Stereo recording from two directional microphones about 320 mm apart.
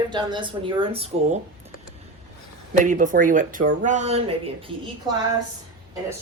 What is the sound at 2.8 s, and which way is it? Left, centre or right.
Speech, right.